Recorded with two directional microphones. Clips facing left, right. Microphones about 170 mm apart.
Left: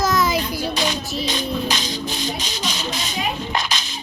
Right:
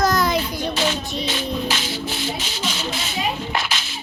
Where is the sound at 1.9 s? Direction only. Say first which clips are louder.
Even; 15° left (ahead or behind).